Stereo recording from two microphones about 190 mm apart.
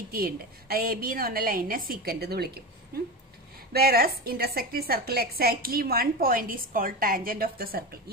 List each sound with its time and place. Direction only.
0.1 s a woman's voice: 50° right (ahead or behind)
3.7 s a woman's voice: 55° right (ahead or behind)